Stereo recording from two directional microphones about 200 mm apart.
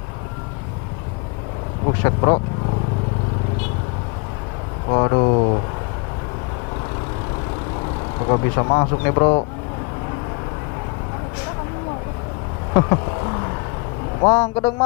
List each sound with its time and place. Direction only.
1.9 s speech: 25° left (ahead or behind)
4.8 s speech: 25° left (ahead or behind)
8.3 s speech: 25° left (ahead or behind)
14.2 s speech: 20° left (ahead or behind)